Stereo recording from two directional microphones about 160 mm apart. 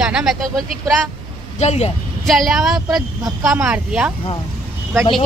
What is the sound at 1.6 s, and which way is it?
Speech, 45° left (ahead or behind).